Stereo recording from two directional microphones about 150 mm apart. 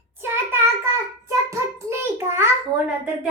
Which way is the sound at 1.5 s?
15° right (ahead or behind).